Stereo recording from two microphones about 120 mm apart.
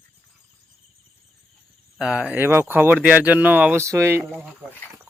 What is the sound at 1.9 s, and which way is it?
Speech, 5° right (ahead or behind).